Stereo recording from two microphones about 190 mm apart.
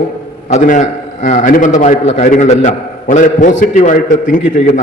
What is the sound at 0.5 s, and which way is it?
A man's voice, 40° left (ahead or behind).